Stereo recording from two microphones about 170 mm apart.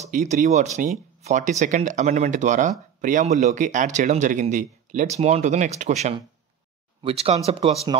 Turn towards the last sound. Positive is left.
turn(degrees=-35)  # may be behind; listen again after turning